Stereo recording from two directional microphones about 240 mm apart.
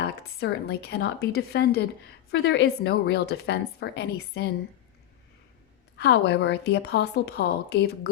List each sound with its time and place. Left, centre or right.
0.0 s a woman's voice: left
6.0 s a woman's voice: left